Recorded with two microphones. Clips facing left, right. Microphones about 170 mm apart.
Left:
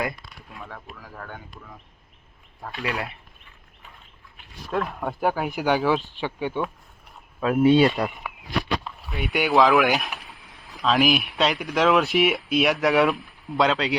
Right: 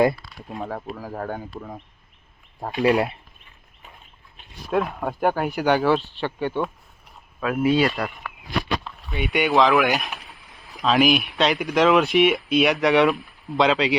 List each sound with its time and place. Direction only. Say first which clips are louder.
0.0 s speech: right 10 dB; 30° right (ahead or behind)
2.7 s speech: right 11 dB; 25° right (ahead or behind)
4.7 s speech: right 3 dB; 5° right (ahead or behind); by 6.7 s 10° left (ahead or behind)
7.4 s speech: left 3 dB; 25° left (ahead or behind)
7.9 s speech: left 2 dB; 15° left (ahead or behind)
8.8 s speech: right 2 dB; centre (ahead or behind)